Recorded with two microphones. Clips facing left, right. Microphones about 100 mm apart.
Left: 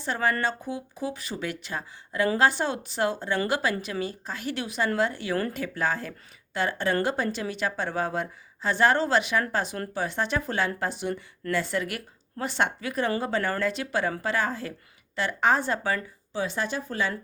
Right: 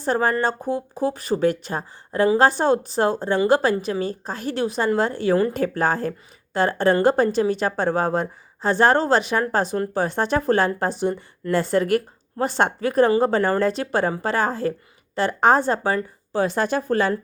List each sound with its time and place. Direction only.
0.0 s a woman's voice: 40° right (ahead or behind)
16.3 s speech: 50° right (ahead or behind)